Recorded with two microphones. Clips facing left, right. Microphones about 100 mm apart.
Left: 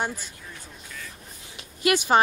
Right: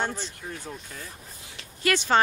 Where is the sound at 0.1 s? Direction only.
60° right (ahead or behind).